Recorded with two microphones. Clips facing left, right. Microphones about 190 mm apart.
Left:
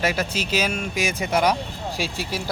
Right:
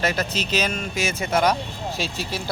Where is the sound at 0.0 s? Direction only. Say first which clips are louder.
Even; 10° left (ahead or behind).